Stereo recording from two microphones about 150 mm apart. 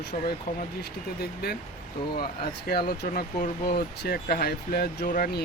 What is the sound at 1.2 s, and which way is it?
Speech, 90° left.